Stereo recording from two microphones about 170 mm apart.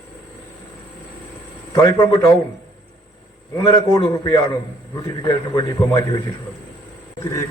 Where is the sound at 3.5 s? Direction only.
20° left (ahead or behind).